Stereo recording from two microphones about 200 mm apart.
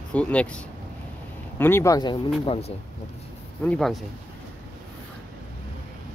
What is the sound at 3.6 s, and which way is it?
Speech, centre (ahead or behind).